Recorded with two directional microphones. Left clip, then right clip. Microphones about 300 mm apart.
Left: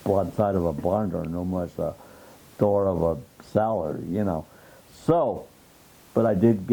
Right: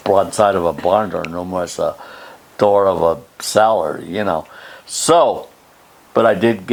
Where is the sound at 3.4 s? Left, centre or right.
Centre.